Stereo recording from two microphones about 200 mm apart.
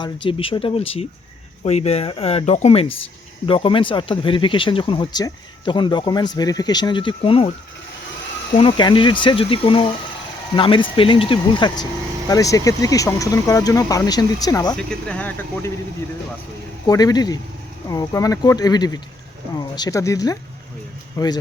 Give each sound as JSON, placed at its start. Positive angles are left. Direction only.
{"t": 0.3, "sound": "speech", "side_deg": 25}
{"t": 8.5, "sound": "speech", "side_deg": 25}
{"t": 14.8, "sound": "speech", "side_deg": 5}
{"t": 16.8, "sound": "speech", "side_deg": 20}